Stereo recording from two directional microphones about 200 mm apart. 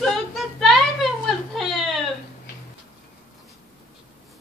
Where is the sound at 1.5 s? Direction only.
Centre (ahead or behind).